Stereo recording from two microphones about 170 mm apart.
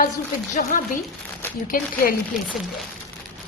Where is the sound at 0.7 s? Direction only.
55° left (ahead or behind).